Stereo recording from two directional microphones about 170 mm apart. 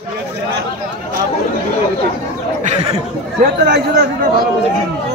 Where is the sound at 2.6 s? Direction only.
40° right (ahead or behind).